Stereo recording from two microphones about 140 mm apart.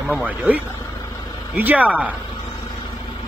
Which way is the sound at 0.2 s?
10° right (ahead or behind).